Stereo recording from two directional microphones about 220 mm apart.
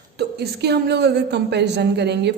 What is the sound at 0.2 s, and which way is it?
A woman's voice, 50° right (ahead or behind).